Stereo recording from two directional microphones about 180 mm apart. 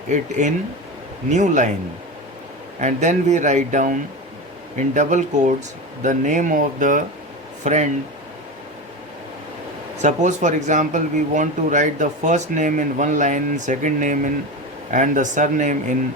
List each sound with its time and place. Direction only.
0.1 s speech: 45° right (ahead or behind)
2.8 s speech: 40° right (ahead or behind)
4.9 s speech: 45° right (ahead or behind)
10.0 s speech: 40° right (ahead or behind)